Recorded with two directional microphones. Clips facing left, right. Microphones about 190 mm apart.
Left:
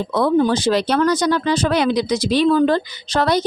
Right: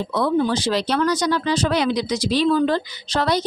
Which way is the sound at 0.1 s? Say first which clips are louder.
Left 4 dB; 50° left (ahead or behind).